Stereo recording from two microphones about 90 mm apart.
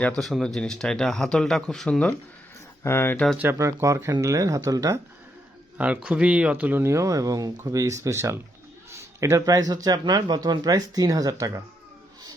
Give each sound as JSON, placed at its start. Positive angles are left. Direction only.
{"t": 0.2, "sound": "speech", "side_deg": 0}
{"t": 2.8, "sound": "speech", "side_deg": 30}
{"t": 3.5, "sound": "speech", "side_deg": -30}
{"t": 5.7, "sound": "speech", "side_deg": -15}
{"t": 6.8, "sound": "speech", "side_deg": -35}